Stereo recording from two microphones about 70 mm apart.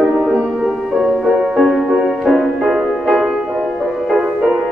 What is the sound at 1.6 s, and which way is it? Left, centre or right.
Music, centre.